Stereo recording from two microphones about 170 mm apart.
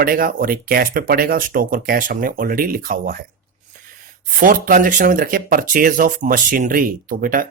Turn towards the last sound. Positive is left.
turn(degrees=-55)  # may be behind; listen again after turning